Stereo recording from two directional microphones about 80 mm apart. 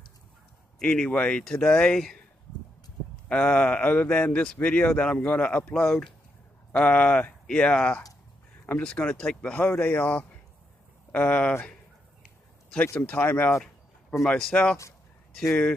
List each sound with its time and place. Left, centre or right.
0.7 s speech: centre
3.3 s speech: centre
13.0 s speech: centre
14.2 s speech: centre